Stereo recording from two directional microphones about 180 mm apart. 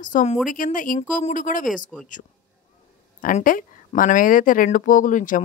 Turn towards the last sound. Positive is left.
turn(degrees=45)  # may be behind; listen again after turning